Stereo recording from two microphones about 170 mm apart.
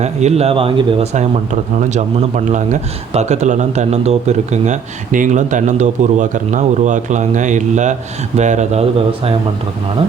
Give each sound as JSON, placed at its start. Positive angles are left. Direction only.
{"t": 0.0, "sound": "speech", "side_deg": -40}
{"t": 1.9, "sound": "speech", "side_deg": -45}